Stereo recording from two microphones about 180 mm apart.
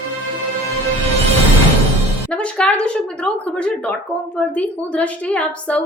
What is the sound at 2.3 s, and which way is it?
Speech, 5° left (ahead or behind).